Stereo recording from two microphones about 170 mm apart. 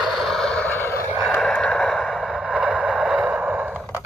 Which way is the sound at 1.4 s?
5° left (ahead or behind).